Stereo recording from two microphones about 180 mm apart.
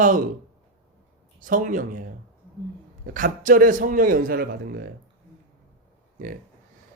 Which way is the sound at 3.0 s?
50° right (ahead or behind).